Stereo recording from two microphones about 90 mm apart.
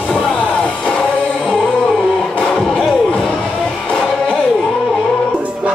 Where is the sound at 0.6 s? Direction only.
10° left (ahead or behind).